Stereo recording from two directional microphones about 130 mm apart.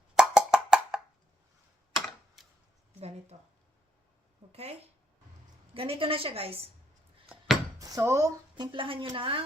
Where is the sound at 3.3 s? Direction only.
50° right (ahead or behind).